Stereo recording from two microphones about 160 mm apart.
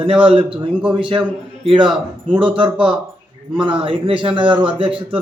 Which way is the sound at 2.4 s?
30° right (ahead or behind).